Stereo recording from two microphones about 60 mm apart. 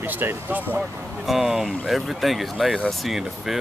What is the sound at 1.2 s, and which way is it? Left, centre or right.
Speech, centre.